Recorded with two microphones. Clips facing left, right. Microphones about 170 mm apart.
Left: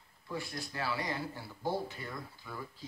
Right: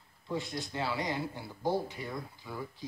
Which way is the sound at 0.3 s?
20° right (ahead or behind).